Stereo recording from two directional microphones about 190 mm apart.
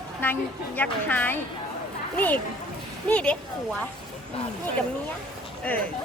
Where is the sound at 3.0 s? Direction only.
5° left (ahead or behind).